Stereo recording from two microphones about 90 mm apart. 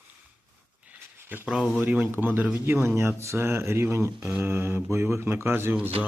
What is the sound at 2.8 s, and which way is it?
Speech, 30° right (ahead or behind).